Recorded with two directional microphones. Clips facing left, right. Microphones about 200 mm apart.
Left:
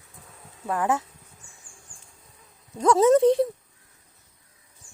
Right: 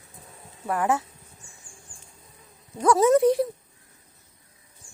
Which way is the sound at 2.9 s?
25° left (ahead or behind).